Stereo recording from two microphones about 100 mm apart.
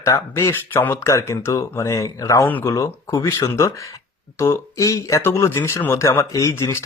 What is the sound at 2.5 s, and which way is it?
Speech, 15° left (ahead or behind).